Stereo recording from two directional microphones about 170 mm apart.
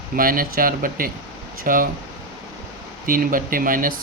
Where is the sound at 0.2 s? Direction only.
55° right (ahead or behind).